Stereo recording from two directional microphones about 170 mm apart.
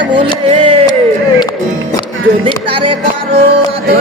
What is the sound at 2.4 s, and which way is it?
Speech, 30° right (ahead or behind).